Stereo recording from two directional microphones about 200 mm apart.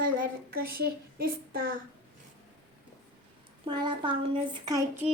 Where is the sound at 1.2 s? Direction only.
50° right (ahead or behind).